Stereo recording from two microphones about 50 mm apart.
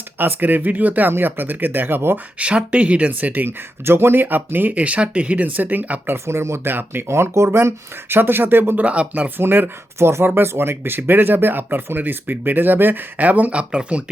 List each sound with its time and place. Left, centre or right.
0.2 s speech: right
2.1 s speech: right
3.1 s speech: right
3.8 s speech: right
4.7 s speech: right
6.2 s speech: right
6.7 s speech: right
7.1 s speech: right
8.1 s speech: right
8.8 s speech: right
9.4 s speech: right; by 14.0 s centre